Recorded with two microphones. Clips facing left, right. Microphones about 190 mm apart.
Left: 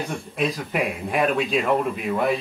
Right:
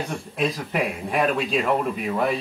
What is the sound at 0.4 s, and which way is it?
Speech, centre (ahead or behind).